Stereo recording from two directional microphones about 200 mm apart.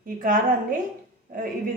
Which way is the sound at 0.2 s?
45° right (ahead or behind).